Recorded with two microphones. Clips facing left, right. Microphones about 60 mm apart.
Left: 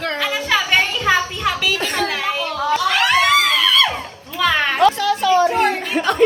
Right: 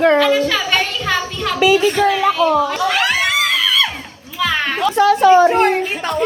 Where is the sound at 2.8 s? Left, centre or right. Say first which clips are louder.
Left 2 dB; centre.